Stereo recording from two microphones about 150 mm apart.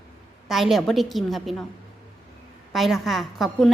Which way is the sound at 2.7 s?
Centre (ahead or behind).